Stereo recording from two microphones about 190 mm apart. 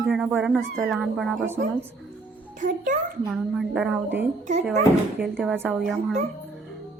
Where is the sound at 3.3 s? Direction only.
5° right (ahead or behind).